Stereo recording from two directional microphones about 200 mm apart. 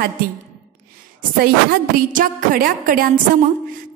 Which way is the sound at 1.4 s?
45° right (ahead or behind).